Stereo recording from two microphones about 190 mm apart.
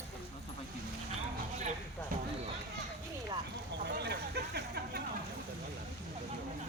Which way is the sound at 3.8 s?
60° right (ahead or behind).